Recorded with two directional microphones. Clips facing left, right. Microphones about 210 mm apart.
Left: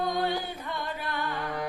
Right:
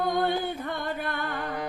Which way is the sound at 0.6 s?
55° right (ahead or behind).